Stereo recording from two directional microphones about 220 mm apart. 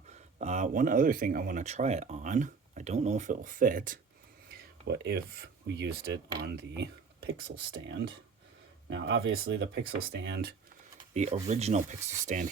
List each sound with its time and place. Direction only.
0.1 s speech: 30° right (ahead or behind)
4.9 s speech: 50° right (ahead or behind)
11.1 s speech: 30° right (ahead or behind)